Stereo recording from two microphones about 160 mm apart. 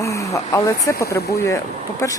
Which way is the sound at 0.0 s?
20° left (ahead or behind).